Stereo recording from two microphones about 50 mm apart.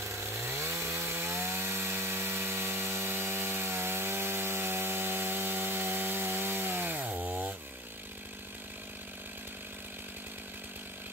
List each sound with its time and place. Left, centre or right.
0.0 s chainsaw: right